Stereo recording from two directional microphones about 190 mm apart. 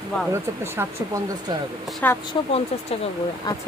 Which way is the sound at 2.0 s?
10° left (ahead or behind).